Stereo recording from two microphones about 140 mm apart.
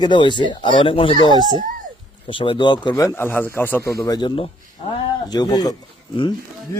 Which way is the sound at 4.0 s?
30° left (ahead or behind).